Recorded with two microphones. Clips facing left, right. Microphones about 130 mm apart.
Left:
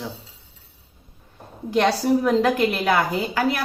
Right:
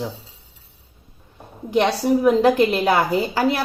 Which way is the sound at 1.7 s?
20° right (ahead or behind).